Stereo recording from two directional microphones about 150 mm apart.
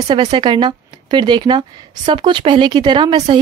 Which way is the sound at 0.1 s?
30° right (ahead or behind).